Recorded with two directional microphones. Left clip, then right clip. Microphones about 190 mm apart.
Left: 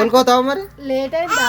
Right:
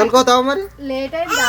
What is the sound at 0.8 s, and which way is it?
Speech, 60° left (ahead or behind).